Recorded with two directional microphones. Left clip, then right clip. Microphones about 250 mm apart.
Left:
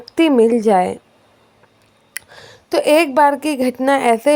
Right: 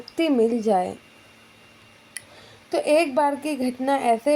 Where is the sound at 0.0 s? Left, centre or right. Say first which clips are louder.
Left 8 dB; left.